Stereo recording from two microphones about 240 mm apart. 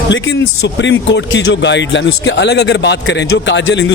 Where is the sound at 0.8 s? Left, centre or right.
Left.